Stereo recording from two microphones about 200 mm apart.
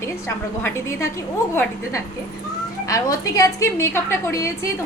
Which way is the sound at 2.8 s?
15° left (ahead or behind).